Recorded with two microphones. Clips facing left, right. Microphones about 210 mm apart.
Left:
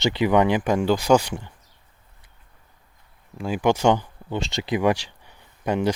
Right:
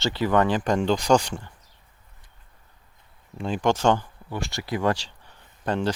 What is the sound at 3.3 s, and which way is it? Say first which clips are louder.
Speech: left 2 dB; 5° left (ahead or behind).